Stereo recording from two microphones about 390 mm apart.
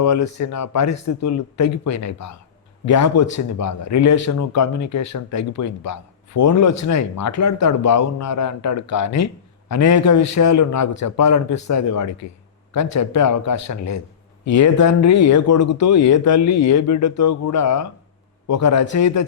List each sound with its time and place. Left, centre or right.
0.0 s a man's voice: left